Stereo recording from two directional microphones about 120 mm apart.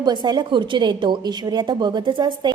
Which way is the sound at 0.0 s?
40° right (ahead or behind).